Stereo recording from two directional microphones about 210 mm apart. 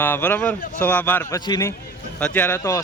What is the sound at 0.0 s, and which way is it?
Speech, 10° left (ahead or behind).